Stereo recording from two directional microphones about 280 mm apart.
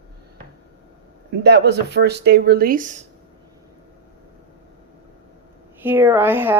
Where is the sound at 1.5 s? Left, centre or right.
Right.